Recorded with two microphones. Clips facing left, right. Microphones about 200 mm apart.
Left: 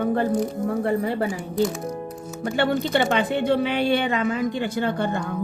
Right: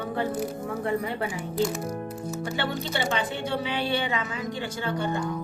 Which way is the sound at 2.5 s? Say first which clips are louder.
Left 10 dB; 55° left (ahead or behind).